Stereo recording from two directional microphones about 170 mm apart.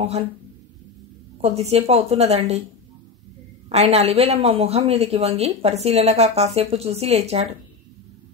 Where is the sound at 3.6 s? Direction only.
40° right (ahead or behind).